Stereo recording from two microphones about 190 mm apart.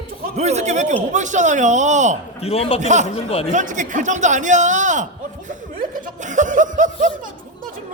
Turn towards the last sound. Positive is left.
turn(degrees=-40)  # may be behind; listen again after turning